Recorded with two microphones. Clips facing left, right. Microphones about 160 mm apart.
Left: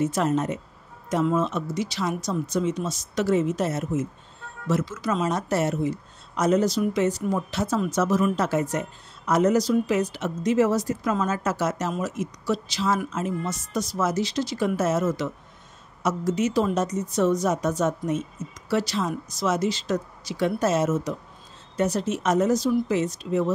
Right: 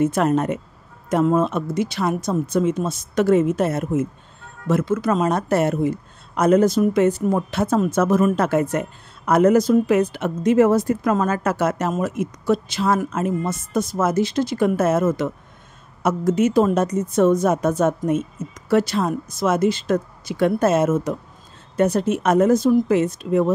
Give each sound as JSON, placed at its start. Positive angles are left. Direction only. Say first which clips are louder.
{"t": 0.0, "sound": "a woman's voice", "louder": "right 5 dB", "side_deg": -55}